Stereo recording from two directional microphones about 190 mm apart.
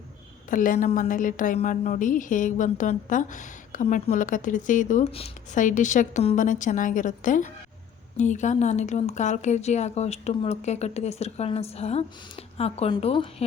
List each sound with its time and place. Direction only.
0.5 s a woman's voice: 45° left (ahead or behind); by 13.2 s 30° left (ahead or behind)